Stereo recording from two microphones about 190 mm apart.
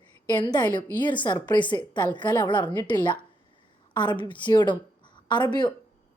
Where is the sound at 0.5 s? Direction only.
25° left (ahead or behind).